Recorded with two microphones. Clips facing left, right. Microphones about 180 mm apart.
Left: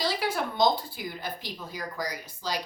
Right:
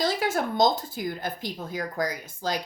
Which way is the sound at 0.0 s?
45° right (ahead or behind).